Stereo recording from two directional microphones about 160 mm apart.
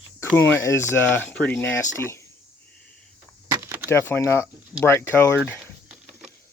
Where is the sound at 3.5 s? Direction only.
20° right (ahead or behind).